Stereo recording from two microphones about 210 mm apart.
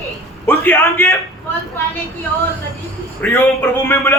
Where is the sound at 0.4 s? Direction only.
10° left (ahead or behind).